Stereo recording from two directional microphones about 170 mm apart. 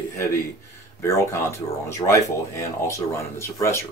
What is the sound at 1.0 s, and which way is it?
Speech, 15° left (ahead or behind).